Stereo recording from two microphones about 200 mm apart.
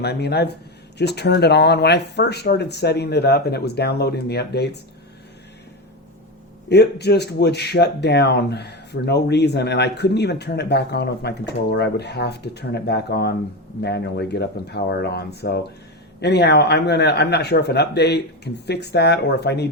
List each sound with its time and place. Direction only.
0.0 s speech: 55° left (ahead or behind)
6.7 s speech: 55° left (ahead or behind)